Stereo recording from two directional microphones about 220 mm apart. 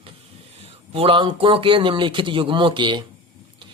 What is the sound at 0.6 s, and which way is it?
A man's voice, 25° right (ahead or behind).